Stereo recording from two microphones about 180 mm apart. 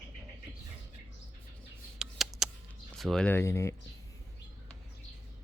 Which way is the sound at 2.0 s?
Centre (ahead or behind).